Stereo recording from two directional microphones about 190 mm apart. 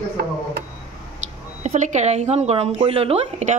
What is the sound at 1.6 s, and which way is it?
Speech, 40° right (ahead or behind).